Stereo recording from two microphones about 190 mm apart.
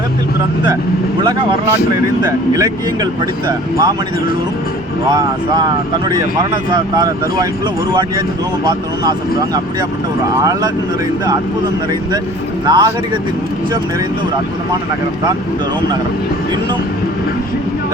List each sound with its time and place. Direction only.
1.2 s speech: 25° right (ahead or behind)
6.9 s speech: 20° right (ahead or behind)
10.4 s speech: 20° right (ahead or behind)
12.6 s speech: 20° right (ahead or behind)